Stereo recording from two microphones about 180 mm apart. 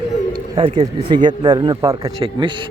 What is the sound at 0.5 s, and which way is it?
Speech, 30° right (ahead or behind).